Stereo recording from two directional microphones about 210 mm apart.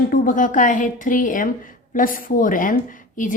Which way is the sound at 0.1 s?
40° left (ahead or behind).